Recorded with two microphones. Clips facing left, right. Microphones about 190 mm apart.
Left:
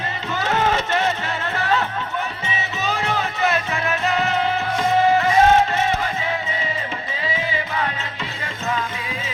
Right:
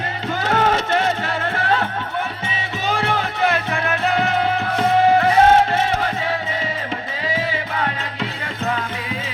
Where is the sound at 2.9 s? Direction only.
55° right (ahead or behind).